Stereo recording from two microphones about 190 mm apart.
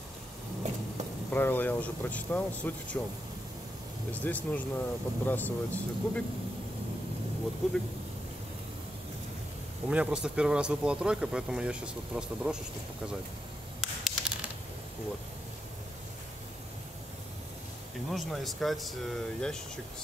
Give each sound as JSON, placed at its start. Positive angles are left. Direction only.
{"t": 1.3, "sound": "speech", "side_deg": 10}
{"t": 4.1, "sound": "speech", "side_deg": 10}
{"t": 9.8, "sound": "speech", "side_deg": -5}
{"t": 13.7, "sound": "a sound", "side_deg": 0}
{"t": 18.1, "sound": "speech", "side_deg": 0}